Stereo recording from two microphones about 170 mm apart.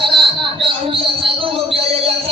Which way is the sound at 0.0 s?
30° right (ahead or behind).